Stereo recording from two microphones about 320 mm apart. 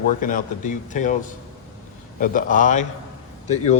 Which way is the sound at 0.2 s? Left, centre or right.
Left.